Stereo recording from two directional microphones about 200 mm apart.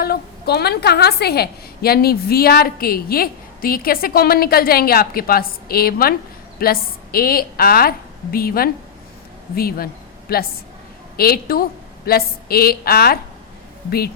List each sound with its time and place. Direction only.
0.0 s a woman's voice: 50° left (ahead or behind)